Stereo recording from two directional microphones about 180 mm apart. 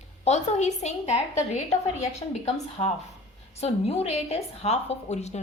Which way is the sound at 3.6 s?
35° left (ahead or behind).